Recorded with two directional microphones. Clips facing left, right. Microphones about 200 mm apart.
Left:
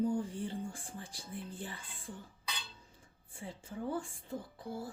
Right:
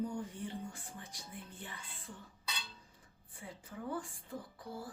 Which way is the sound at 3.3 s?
25° left (ahead or behind).